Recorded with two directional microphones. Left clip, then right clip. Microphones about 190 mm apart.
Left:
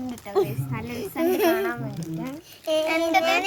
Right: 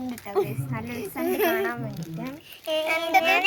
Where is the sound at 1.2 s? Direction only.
20° left (ahead or behind).